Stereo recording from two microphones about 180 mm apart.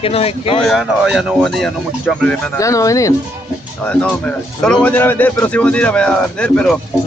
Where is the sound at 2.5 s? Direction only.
15° left (ahead or behind).